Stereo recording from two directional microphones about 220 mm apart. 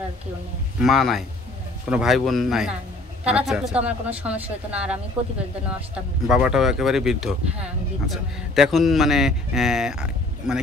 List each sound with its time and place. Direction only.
0.8 s speech: centre (ahead or behind)